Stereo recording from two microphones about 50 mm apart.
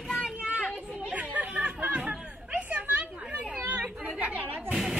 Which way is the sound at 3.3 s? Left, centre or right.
Right.